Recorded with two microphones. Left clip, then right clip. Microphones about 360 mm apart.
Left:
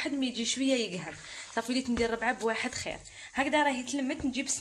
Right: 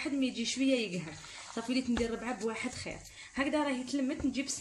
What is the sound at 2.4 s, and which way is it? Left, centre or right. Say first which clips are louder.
Speech: left 5 dB; left.